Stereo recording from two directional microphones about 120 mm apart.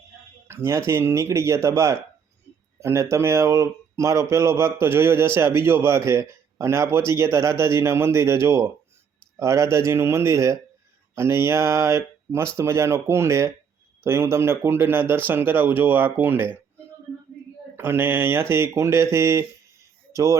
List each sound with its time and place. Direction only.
0.4 s speech: 20° right (ahead or behind)
17.7 s speech: 20° right (ahead or behind)